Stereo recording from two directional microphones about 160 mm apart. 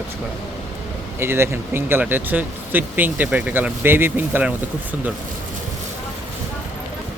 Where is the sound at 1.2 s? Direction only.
15° right (ahead or behind).